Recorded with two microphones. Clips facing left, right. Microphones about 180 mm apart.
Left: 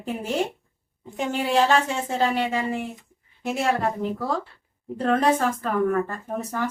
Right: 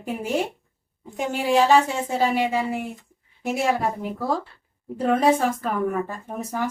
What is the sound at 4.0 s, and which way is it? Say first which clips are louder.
Speech: even; 10° right (ahead or behind).